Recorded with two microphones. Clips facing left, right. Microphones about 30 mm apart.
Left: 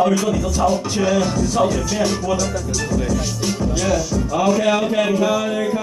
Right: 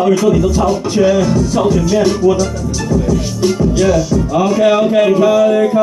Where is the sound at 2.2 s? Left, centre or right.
Centre.